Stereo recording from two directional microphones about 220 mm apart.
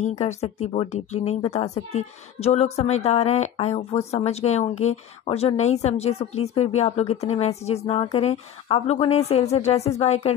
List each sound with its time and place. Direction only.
0.2 s speech: 30° left (ahead or behind)